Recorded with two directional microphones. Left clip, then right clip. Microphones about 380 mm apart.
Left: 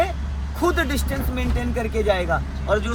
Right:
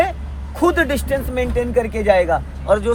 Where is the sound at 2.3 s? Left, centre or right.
Centre.